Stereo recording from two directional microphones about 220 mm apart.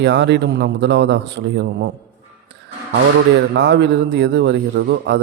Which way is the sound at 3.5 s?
50° right (ahead or behind).